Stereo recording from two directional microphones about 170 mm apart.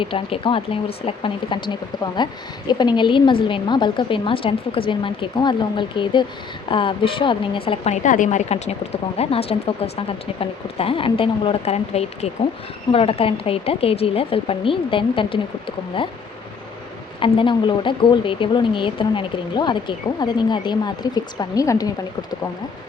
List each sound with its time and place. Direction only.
0.0 s speech: 30° left (ahead or behind)
8.0 s speech: 50° left (ahead or behind); by 16.0 s 30° left (ahead or behind)
17.2 s speech: 30° left (ahead or behind)